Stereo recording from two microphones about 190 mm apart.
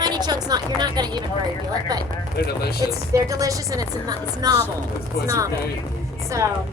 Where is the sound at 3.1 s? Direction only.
15° right (ahead or behind).